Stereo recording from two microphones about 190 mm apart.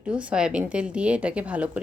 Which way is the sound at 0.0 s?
5° right (ahead or behind).